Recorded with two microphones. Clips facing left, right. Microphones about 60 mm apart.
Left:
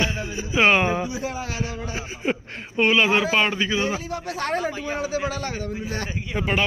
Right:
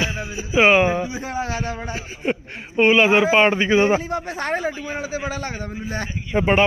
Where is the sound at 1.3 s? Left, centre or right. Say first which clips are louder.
Right 4 dB; right.